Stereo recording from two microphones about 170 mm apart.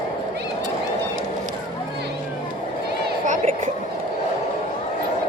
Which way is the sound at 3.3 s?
50° right (ahead or behind).